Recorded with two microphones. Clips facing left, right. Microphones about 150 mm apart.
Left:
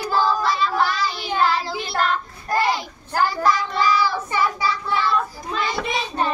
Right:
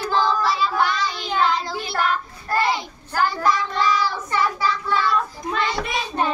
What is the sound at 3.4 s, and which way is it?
Child singing, 10° left (ahead or behind).